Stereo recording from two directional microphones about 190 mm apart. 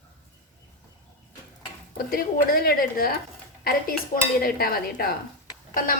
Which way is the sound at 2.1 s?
50° left (ahead or behind).